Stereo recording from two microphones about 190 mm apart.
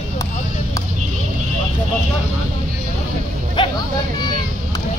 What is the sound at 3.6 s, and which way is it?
Vehicle, 25° left (ahead or behind).